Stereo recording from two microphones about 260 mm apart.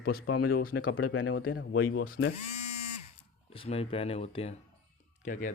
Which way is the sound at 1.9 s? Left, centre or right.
Left.